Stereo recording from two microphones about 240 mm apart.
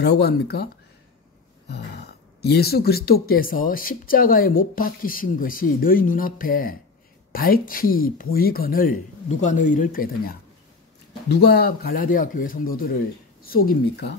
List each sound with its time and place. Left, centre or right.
0.0 s speech: left
2.4 s speech: left